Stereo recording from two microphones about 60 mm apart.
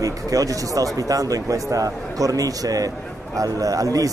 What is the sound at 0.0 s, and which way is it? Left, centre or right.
Speech, right.